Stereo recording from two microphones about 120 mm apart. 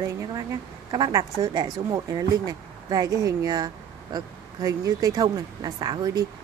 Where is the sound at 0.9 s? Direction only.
30° right (ahead or behind).